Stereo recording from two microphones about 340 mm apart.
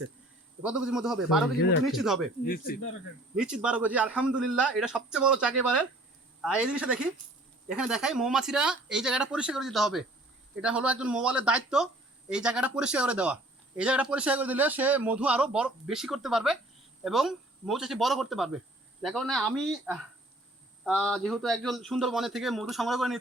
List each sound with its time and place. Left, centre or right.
0.6 s speech: centre
2.4 s speech: left
3.3 s speech: centre